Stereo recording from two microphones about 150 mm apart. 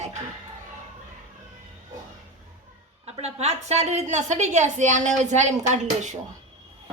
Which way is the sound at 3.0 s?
45° right (ahead or behind).